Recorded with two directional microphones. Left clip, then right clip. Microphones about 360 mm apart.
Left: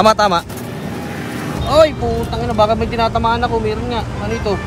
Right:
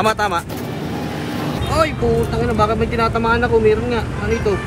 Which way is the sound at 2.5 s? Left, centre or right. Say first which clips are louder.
Left 5 dB; centre.